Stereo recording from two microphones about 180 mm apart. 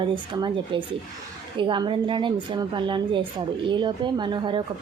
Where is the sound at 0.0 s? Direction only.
25° right (ahead or behind).